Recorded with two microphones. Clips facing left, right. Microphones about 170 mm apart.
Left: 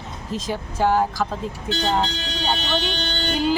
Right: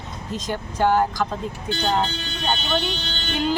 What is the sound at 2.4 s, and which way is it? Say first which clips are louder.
Speech: even; 70° left (ahead or behind).